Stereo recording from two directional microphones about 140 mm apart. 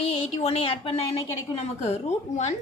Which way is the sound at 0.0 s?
45° left (ahead or behind).